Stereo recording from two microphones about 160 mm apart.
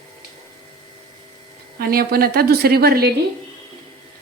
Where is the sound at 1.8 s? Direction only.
70° right (ahead or behind).